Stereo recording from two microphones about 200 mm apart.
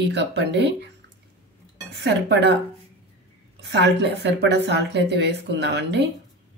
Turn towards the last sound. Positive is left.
turn(degrees=-60)  # may be behind; listen again after turning